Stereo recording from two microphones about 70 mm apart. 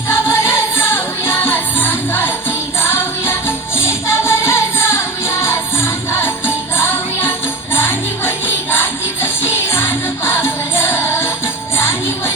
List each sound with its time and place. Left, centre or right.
0.1 s music: left